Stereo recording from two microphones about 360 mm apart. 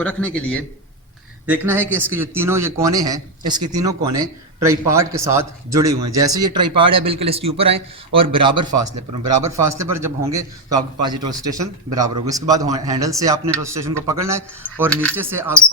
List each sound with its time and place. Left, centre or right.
0.0 s a man's voice: centre
9.0 s a man's voice: right
9.5 s speech: centre